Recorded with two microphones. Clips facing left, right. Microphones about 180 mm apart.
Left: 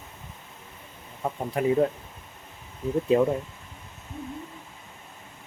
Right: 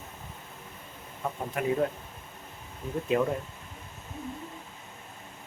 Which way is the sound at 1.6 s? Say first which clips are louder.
Left 5 dB; 30° left (ahead or behind).